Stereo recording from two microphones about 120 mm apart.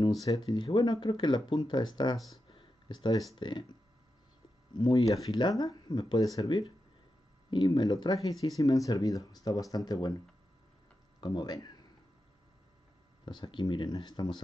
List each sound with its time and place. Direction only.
0.2 s speech: 30° left (ahead or behind)
4.7 s speech: 35° left (ahead or behind)
11.1 s speech: 35° left (ahead or behind)
13.2 s speech: 40° left (ahead or behind)